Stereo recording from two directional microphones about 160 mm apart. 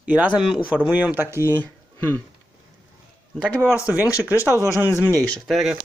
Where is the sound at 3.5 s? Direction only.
15° left (ahead or behind).